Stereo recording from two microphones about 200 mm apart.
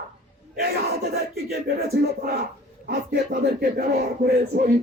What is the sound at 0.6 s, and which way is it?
Battle cry, 50° right (ahead or behind).